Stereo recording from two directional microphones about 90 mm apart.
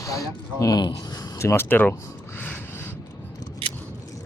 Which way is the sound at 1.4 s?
30° left (ahead or behind).